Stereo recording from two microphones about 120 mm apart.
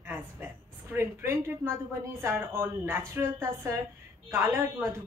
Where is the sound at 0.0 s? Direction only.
15° right (ahead or behind).